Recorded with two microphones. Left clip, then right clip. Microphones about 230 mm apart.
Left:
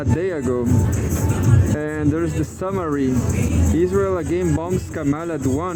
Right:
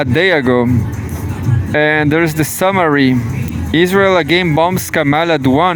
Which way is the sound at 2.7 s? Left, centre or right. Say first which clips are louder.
Right 10 dB; right.